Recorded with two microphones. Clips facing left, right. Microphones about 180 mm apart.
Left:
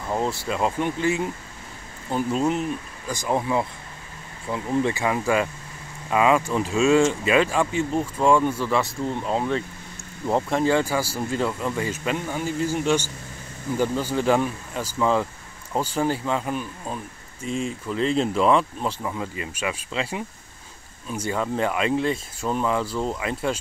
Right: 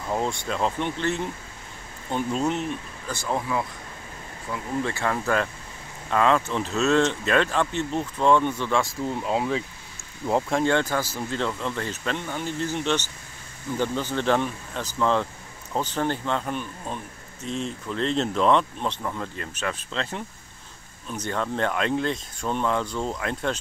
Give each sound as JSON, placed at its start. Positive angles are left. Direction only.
{"t": 0.1, "sound": "speech", "side_deg": 5}